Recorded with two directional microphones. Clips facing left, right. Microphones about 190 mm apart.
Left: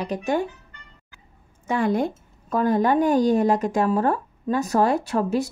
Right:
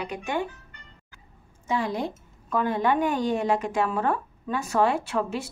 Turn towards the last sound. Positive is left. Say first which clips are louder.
# left 5 dB
turn(degrees=40)  # may be behind; listen again after turning